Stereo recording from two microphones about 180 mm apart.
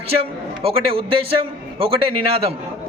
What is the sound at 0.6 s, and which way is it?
Speech, 30° right (ahead or behind).